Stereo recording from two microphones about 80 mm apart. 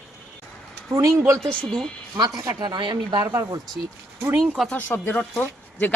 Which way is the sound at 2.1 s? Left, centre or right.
Right.